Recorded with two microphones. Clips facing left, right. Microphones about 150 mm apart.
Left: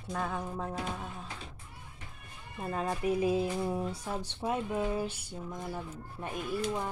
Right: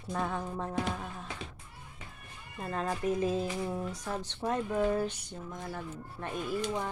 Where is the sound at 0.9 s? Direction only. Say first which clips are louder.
Right 1 dB; centre (ahead or behind).